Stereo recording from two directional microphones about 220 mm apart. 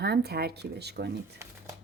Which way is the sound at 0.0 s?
45° right (ahead or behind).